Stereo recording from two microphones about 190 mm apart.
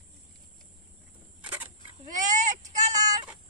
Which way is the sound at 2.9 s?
20° right (ahead or behind).